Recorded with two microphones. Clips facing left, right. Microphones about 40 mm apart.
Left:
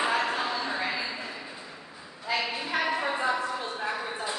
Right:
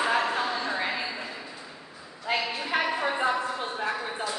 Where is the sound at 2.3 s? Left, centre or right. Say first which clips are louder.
Right 1 dB; right.